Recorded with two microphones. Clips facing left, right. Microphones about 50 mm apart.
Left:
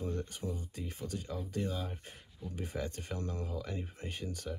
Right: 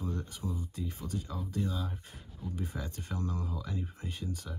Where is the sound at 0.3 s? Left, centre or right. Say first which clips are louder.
Right 1 dB; left.